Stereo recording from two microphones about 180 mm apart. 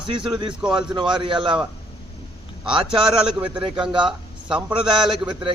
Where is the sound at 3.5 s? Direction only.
25° right (ahead or behind).